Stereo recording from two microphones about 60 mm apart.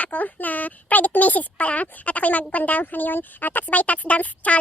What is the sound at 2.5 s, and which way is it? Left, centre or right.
Speech, left.